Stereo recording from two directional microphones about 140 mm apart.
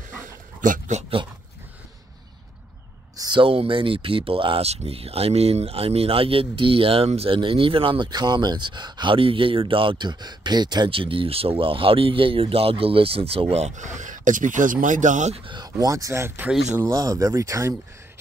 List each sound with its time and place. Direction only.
0.6 s speech: 65° right (ahead or behind)
3.2 s speech: 35° right (ahead or behind); by 15.4 s 55° right (ahead or behind)
15.4 s speech: 35° right (ahead or behind); by 16.9 s 15° right (ahead or behind)
16.9 s speech: 25° right (ahead or behind)